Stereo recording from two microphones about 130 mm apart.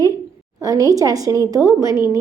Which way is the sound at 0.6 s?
25° right (ahead or behind).